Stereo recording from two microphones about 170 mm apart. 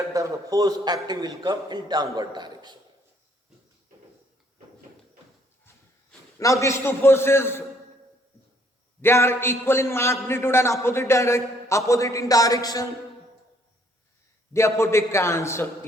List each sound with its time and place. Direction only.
0.1 s a man's voice: 20° right (ahead or behind)
6.4 s a man's voice: 20° left (ahead or behind)
9.0 s a man's voice: 15° left (ahead or behind)
14.5 s a man's voice: 15° left (ahead or behind)